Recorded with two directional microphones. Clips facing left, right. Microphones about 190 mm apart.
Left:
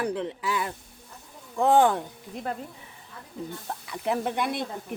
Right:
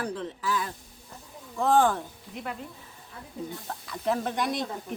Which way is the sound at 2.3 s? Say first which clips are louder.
Left 4 dB; 40° left (ahead or behind).